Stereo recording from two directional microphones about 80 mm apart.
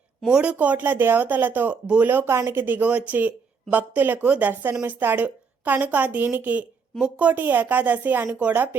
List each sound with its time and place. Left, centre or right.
0.3 s speech: centre
0.5 s speech: right